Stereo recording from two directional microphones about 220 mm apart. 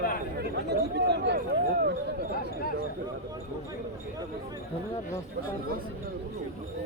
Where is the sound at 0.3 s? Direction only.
45° right (ahead or behind).